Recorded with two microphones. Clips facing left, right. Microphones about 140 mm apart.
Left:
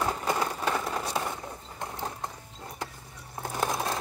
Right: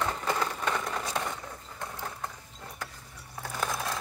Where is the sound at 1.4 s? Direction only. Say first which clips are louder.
Left 2 dB; 20° left (ahead or behind).